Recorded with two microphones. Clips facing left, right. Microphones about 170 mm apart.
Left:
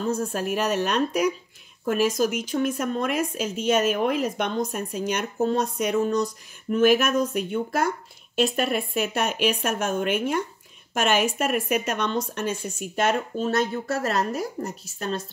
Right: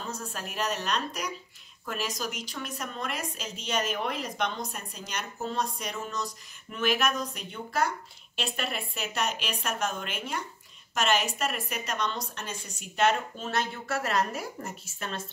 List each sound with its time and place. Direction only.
0.1 s a woman's voice: 50° left (ahead or behind)